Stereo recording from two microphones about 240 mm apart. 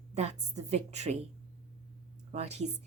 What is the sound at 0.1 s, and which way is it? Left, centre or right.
A woman's voice, right.